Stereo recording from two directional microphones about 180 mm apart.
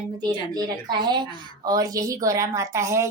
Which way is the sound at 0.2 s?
25° right (ahead or behind).